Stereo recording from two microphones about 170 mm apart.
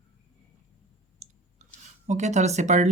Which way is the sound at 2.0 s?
45° right (ahead or behind).